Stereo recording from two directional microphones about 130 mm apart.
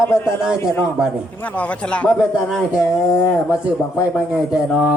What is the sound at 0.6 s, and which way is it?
Speech, 20° left (ahead or behind).